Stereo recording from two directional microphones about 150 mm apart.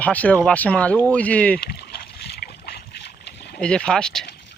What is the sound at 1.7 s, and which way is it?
Boat, 90° left.